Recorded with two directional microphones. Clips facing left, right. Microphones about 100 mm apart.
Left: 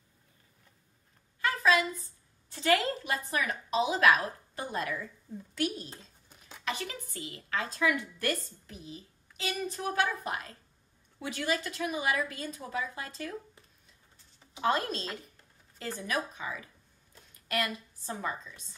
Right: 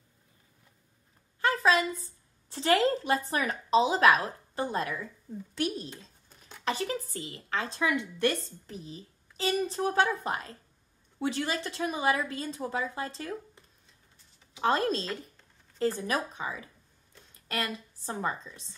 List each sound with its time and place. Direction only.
1.4 s a sound: 35° right (ahead or behind)
2.0 s a woman's voice: 35° right (ahead or behind)
14.6 s a woman's voice: 35° right (ahead or behind)